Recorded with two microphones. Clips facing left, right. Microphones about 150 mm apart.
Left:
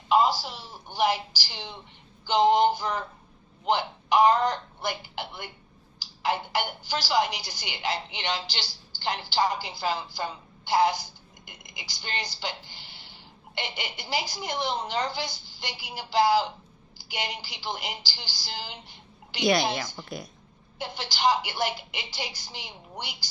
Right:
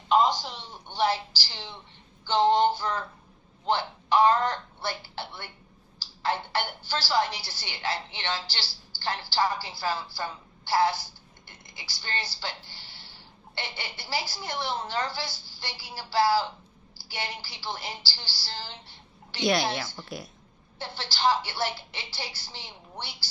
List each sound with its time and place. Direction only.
0.1 s a man's voice: 5° left (ahead or behind)
20.1 s speech: centre (ahead or behind)
20.7 s a woman's voice: 15° left (ahead or behind)